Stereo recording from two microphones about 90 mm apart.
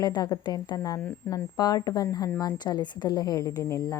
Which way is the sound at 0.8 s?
35° left (ahead or behind).